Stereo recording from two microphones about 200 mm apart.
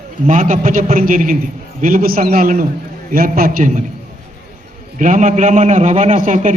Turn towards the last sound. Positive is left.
turn(degrees=-40)  # may be behind; listen again after turning